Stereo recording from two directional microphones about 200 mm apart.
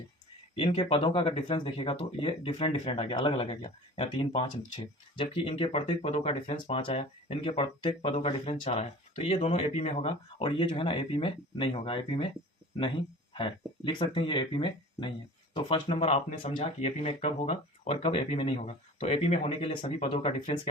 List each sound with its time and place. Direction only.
0.5 s speech: 25° left (ahead or behind)
13.3 s speech: 25° left (ahead or behind)